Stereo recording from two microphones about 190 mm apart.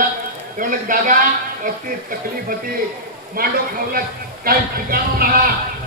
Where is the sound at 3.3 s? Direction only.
50° right (ahead or behind).